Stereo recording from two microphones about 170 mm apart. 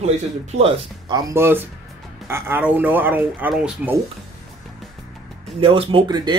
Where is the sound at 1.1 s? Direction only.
15° right (ahead or behind).